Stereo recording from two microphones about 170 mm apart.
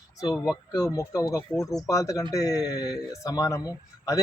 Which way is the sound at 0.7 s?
20° left (ahead or behind).